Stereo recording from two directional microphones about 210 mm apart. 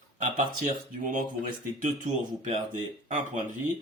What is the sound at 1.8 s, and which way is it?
A man's voice, 35° right (ahead or behind).